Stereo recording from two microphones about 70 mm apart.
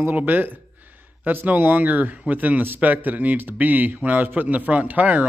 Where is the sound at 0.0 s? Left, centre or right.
Right.